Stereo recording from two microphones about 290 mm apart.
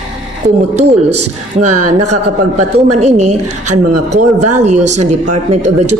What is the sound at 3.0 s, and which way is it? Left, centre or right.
Speech, right.